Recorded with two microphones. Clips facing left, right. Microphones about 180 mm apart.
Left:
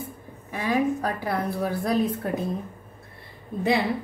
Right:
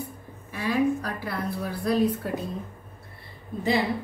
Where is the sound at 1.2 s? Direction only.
50° left (ahead or behind).